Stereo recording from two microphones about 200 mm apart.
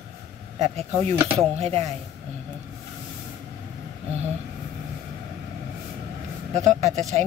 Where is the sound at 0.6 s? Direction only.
30° right (ahead or behind).